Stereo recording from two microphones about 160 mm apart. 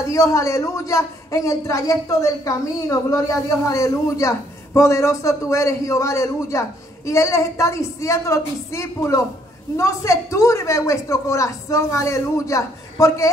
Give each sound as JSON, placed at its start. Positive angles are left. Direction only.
{"t": 0.0, "sound": "a man's voice", "side_deg": 20}